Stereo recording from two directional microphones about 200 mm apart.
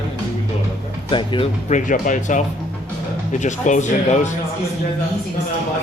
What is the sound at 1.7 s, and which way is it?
Speech, 40° left (ahead or behind).